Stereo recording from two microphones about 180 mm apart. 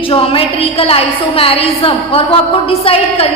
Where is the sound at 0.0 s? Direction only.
30° left (ahead or behind).